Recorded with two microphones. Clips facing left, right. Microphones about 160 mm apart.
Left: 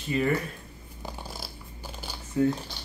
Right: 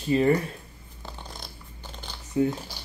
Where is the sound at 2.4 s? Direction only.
20° right (ahead or behind).